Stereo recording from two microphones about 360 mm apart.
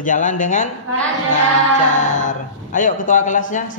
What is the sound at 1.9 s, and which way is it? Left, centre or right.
Speech, left.